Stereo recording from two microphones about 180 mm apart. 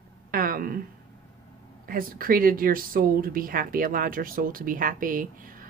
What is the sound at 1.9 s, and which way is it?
Speech, 50° right (ahead or behind).